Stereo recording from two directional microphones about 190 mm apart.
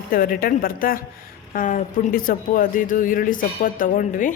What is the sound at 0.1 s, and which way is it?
Speech, 50° left (ahead or behind).